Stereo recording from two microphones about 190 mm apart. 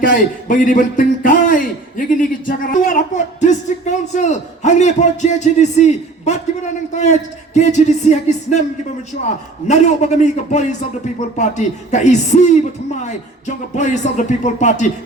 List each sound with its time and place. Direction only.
0.0 s a man's voice: 45° left (ahead or behind)
9.6 s a man's voice: 35° left (ahead or behind)